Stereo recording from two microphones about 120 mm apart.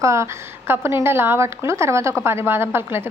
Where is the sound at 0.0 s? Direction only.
25° right (ahead or behind).